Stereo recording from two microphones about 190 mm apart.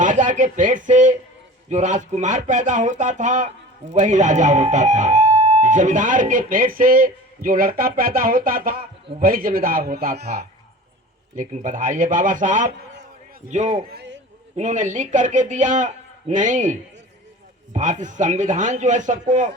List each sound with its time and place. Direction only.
0.0 s a man's voice: 40° right (ahead or behind)
17.7 s a man's voice: 40° right (ahead or behind)